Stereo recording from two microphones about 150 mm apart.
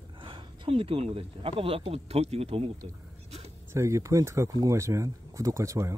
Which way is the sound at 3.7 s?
20° right (ahead or behind).